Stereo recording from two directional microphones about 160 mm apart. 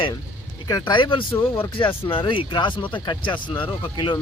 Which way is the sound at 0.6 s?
25° left (ahead or behind).